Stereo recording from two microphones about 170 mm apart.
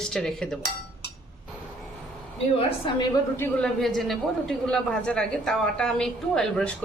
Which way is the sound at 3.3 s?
10° left (ahead or behind).